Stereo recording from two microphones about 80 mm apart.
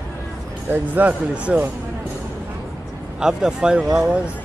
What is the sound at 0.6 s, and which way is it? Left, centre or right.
Speech, right.